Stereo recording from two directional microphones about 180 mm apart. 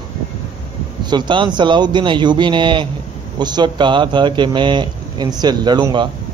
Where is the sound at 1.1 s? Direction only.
25° right (ahead or behind).